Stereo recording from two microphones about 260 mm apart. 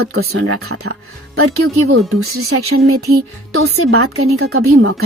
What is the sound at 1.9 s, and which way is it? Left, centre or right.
Speech, right.